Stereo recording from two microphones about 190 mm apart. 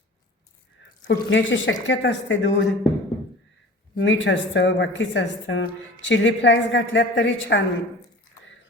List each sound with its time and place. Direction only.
1.0 s speech: 75° left (ahead or behind)
3.9 s speech: 80° left